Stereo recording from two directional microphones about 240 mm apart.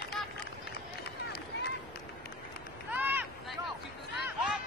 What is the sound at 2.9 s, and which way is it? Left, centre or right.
Vehicle, centre.